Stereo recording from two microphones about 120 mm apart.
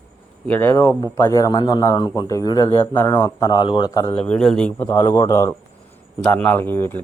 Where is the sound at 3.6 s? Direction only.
40° left (ahead or behind).